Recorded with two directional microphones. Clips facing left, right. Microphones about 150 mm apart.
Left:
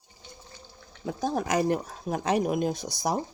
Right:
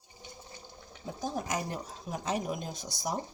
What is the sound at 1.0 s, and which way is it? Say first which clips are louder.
Speech: left 7 dB; 85° left.